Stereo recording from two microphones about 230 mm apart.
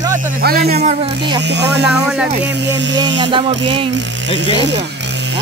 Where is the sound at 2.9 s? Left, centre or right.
Centre.